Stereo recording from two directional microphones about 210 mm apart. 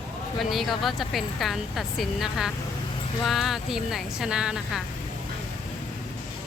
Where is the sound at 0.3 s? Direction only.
Centre (ahead or behind).